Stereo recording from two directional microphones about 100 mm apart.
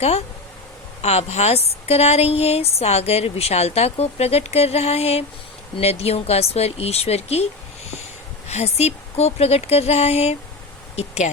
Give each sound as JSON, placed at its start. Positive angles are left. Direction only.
{"t": 1.0, "sound": "a woman's voice", "side_deg": 90}
{"t": 8.4, "sound": "a woman's voice", "side_deg": 90}